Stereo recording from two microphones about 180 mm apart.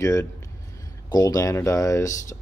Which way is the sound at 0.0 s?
15° left (ahead or behind).